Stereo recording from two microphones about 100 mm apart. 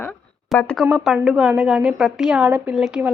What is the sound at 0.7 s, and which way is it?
A woman's voice, 5° right (ahead or behind).